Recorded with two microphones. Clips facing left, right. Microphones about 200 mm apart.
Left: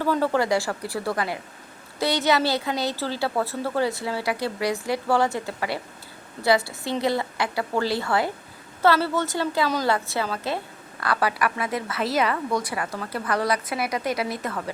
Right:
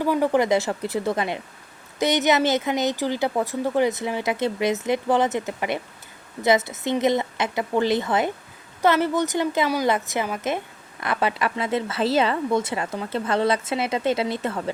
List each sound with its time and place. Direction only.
0.0 s a woman's voice: 15° right (ahead or behind)